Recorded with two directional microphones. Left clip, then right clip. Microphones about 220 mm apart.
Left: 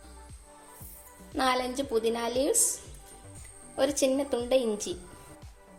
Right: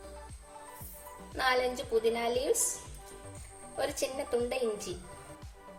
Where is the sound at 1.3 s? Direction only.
30° left (ahead or behind).